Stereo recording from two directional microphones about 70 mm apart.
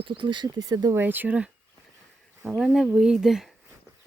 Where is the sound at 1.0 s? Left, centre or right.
Right.